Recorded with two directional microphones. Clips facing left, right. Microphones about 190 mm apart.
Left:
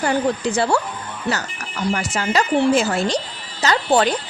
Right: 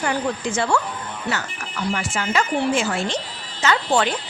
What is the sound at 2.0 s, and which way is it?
Speech, 40° left (ahead or behind).